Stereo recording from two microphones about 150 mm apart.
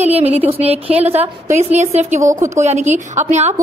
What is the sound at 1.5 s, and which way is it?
A woman's voice, 50° right (ahead or behind).